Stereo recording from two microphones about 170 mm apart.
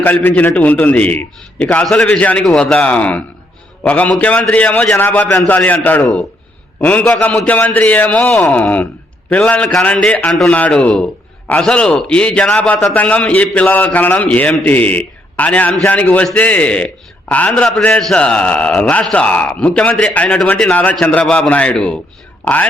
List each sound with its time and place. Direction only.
0.0 s a man's voice: 10° left (ahead or behind)